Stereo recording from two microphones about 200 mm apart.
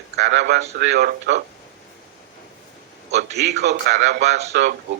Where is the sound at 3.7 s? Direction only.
60° right (ahead or behind).